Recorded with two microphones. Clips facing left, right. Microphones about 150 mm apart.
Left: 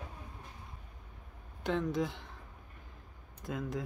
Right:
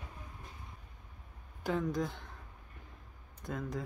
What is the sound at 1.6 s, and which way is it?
Speech, centre (ahead or behind).